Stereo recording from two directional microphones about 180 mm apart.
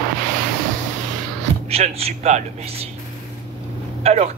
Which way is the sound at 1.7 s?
35° right (ahead or behind).